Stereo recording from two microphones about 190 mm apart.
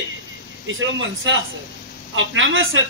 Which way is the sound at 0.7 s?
90° right.